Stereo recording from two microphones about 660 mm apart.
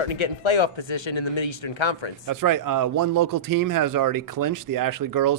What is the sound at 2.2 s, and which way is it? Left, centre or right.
A man's voice, right.